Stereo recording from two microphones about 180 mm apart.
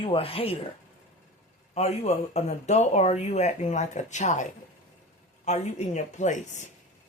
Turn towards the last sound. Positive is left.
turn(degrees=45)  # may be behind; listen again after turning